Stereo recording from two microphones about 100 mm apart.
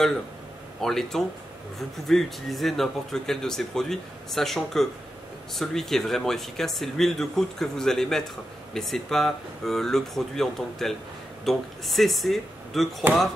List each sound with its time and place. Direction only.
0.7 s speech: 5° left (ahead or behind)
13.0 s speech: 20° right (ahead or behind)